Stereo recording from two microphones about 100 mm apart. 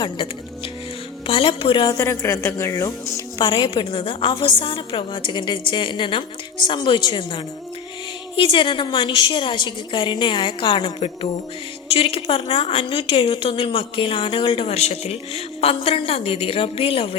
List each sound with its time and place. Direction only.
0.0 s a woman's voice: 60° left (ahead or behind)
2.0 s a woman's voice: 30° left (ahead or behind)
3.3 s a woman's voice: 50° left (ahead or behind); by 17.2 s 70° left (ahead or behind)